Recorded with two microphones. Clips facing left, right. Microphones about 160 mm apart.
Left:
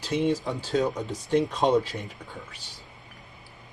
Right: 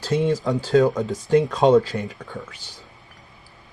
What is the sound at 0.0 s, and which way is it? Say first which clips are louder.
Speech: right 4 dB; 90° right.